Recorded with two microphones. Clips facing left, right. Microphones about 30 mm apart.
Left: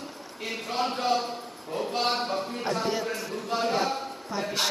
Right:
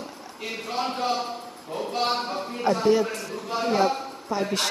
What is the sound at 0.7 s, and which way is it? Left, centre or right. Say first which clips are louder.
A man's voice: even; centre.